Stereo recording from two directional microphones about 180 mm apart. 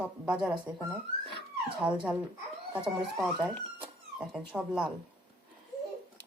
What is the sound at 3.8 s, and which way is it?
Speech, 5° right (ahead or behind).